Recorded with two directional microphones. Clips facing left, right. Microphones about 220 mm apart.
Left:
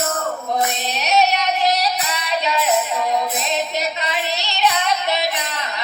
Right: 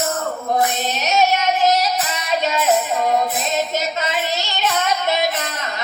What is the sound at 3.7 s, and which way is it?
Female singing, 45° right (ahead or behind).